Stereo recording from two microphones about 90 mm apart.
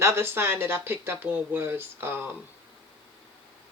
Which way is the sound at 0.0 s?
30° right (ahead or behind).